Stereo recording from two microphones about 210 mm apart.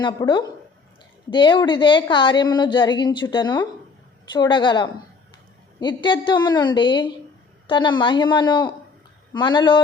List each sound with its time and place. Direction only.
0.0 s a woman's voice: 20° left (ahead or behind)